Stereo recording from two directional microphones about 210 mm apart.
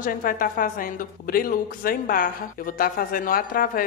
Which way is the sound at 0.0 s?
45° left (ahead or behind).